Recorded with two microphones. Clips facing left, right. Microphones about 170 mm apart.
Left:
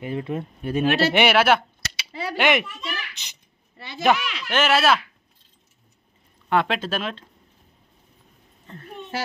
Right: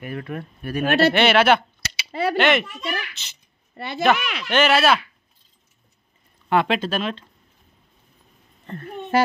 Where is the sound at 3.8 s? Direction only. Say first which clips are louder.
Right 1 dB; 60° right (ahead or behind).